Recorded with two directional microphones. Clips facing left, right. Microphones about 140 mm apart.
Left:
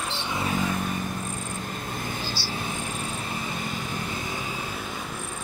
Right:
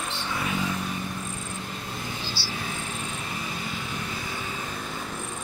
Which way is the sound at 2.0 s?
50° left (ahead or behind).